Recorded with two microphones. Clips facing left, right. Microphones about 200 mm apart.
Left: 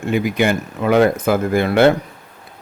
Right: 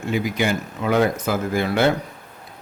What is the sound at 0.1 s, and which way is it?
Speech, 60° left (ahead or behind).